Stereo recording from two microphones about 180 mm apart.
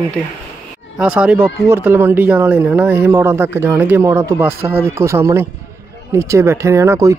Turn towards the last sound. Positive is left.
turn(degrees=-15)  # may be behind; listen again after turning